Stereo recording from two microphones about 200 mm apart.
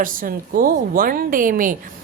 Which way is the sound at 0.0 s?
45° right (ahead or behind).